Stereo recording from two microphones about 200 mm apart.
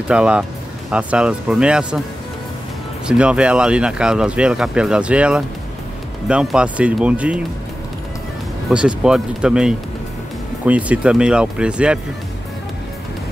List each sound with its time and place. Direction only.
0.1 s speech: 5° right (ahead or behind)
3.1 s speech: 5° right (ahead or behind)
8.6 s speech: 5° right (ahead or behind)